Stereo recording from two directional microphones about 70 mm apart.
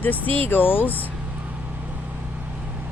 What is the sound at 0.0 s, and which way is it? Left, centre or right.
Speech, left.